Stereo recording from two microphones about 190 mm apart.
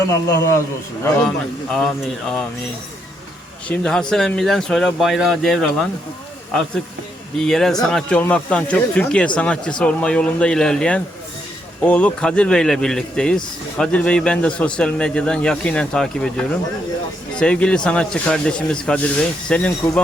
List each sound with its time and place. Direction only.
0.1 s a man's voice: 15° left (ahead or behind)
1.7 s speech: 5° left (ahead or behind)
3.7 s speech: 5° left (ahead or behind)
7.3 s speech: centre (ahead or behind)